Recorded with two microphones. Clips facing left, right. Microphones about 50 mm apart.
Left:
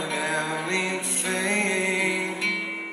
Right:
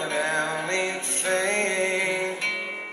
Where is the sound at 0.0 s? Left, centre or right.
Centre.